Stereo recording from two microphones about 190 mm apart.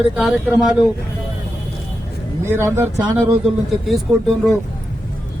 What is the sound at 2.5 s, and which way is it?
Speech, 15° right (ahead or behind).